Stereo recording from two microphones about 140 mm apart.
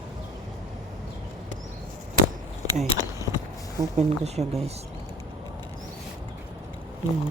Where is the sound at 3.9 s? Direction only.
50° right (ahead or behind).